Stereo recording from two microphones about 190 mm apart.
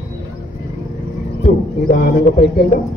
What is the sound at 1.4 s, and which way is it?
Speech, 50° left (ahead or behind).